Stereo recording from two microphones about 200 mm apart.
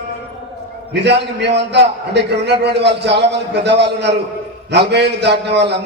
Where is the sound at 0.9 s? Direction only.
60° right (ahead or behind).